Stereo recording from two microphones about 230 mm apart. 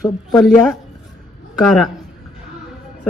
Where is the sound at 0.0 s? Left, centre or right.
Centre.